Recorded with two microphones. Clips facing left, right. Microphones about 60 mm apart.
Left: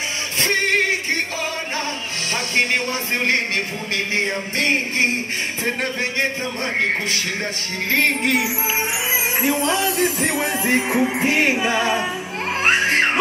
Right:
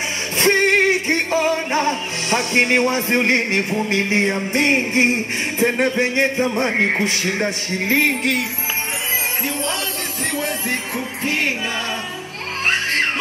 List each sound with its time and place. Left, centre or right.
0.4 s music: right
5.6 s speech: right
7.9 s music: centre
8.2 s music: centre
9.4 s music: centre